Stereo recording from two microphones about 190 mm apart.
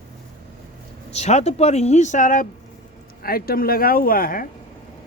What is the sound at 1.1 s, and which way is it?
A woman's voice, 35° left (ahead or behind).